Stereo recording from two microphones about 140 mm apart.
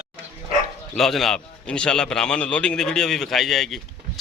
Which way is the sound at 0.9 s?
Centre (ahead or behind).